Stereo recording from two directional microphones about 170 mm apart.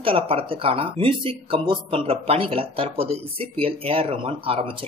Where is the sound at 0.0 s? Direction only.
35° right (ahead or behind).